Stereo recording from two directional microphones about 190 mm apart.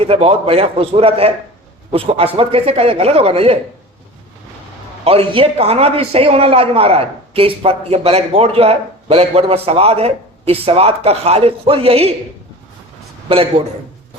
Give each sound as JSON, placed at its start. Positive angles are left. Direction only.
{"t": 0.0, "sound": "a man's voice", "side_deg": -30}
{"t": 5.0, "sound": "a man's voice", "side_deg": -30}
{"t": 13.2, "sound": "a man's voice", "side_deg": -30}